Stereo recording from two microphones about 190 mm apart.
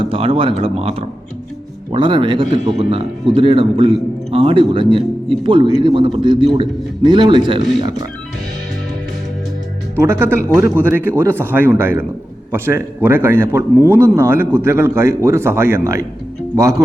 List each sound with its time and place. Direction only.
0.0 s speech: 30° right (ahead or behind)
9.9 s a man's voice: 15° right (ahead or behind)